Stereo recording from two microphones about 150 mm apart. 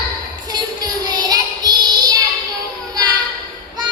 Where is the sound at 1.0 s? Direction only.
25° right (ahead or behind).